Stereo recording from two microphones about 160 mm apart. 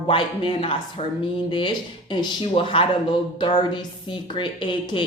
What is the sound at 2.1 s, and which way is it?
Speech, 30° left (ahead or behind).